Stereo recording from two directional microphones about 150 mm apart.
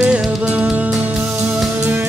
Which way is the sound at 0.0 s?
5° right (ahead or behind).